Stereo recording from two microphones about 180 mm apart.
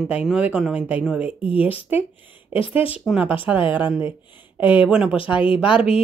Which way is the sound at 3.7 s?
10° right (ahead or behind).